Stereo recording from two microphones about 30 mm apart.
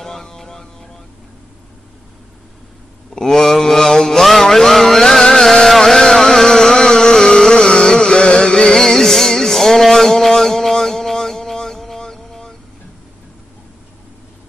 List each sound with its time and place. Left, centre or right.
0.0 s music: centre
3.2 s mantra: centre
4.4 s music: centre
5.7 s a sound: centre; by 8.6 s left
8.6 s music: centre
12.0 s vehicle: centre